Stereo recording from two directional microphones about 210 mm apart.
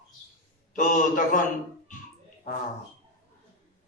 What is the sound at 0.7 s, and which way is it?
Speech, 40° left (ahead or behind).